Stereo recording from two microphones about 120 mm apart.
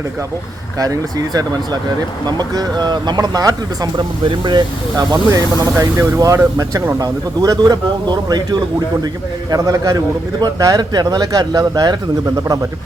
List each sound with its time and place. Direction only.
0.8 s speech: 30° right (ahead or behind)